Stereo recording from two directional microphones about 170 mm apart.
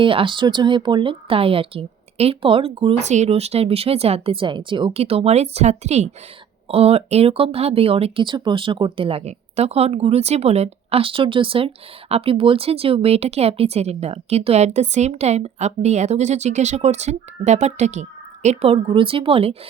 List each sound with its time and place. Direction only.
0.0 s speech: 30° right (ahead or behind)